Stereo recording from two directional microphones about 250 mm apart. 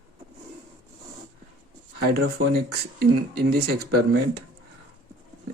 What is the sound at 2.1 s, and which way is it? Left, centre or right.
Speech, right.